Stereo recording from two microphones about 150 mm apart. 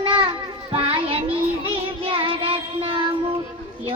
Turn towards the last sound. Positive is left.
turn(degrees=-35)  # may be behind; listen again after turning